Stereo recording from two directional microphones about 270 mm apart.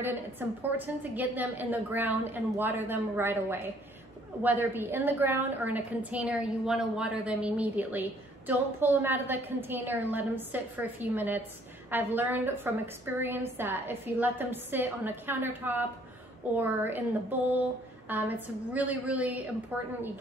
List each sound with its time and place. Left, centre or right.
0.0 s a woman's voice: centre